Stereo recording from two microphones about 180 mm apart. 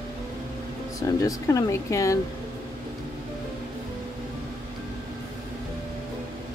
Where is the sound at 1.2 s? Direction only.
20° left (ahead or behind).